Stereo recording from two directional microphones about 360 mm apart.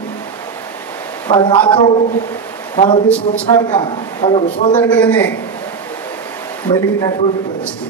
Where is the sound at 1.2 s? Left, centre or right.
Centre.